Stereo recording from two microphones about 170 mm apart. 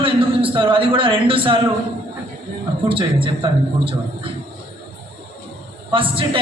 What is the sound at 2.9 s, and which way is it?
A man's voice, 30° right (ahead or behind).